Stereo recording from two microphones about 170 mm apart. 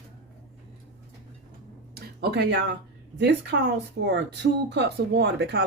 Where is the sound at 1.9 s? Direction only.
75° right (ahead or behind).